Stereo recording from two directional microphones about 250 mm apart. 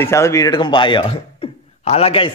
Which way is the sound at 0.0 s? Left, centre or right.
Centre.